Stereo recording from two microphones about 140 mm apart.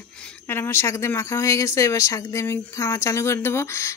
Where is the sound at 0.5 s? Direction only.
15° left (ahead or behind).